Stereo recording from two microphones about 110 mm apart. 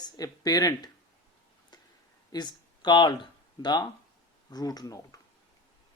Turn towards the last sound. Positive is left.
turn(degrees=30)  # may be behind; listen again after turning